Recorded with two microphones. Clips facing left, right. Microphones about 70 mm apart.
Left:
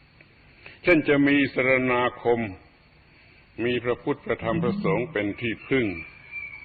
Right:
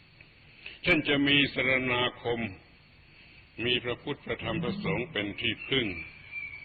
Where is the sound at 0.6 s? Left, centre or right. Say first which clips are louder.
Left 8 dB; left.